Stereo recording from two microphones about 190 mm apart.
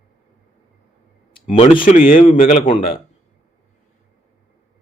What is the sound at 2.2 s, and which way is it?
Speech, 35° left (ahead or behind).